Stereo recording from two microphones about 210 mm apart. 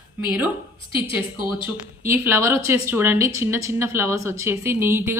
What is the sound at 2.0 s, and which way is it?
A woman's voice, 10° right (ahead or behind).